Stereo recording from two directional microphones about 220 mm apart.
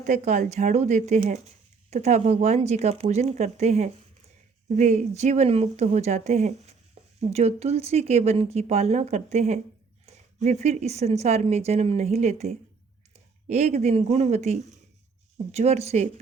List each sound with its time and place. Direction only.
0.0 s speech: 35° right (ahead or behind)